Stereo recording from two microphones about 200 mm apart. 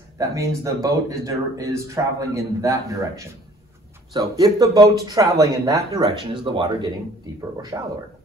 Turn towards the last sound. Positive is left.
turn(degrees=-15)  # may be behind; listen again after turning